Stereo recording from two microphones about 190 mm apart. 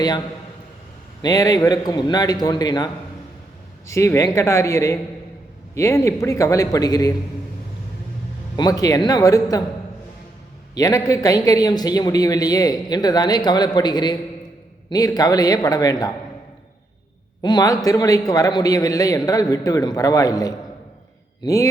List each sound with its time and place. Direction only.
1.2 s a man's voice: 20° left (ahead or behind)
8.5 s a man's voice: 20° left (ahead or behind)
10.8 s a man's voice: 20° left (ahead or behind)
17.4 s a man's voice: 20° left (ahead or behind)